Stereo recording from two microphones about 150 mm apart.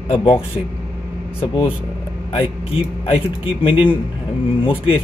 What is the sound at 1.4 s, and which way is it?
Speech, 35° left (ahead or behind).